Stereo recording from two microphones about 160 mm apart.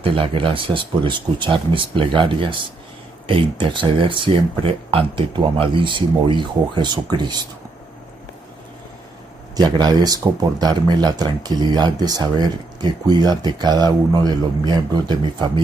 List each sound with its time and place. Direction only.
0.0 s speech: 35° right (ahead or behind)
9.6 s speech: 25° right (ahead or behind)